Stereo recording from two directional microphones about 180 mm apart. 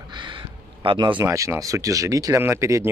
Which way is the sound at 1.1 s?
15° right (ahead or behind).